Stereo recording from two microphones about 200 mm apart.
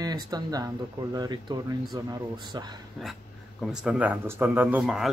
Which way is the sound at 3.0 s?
Centre (ahead or behind).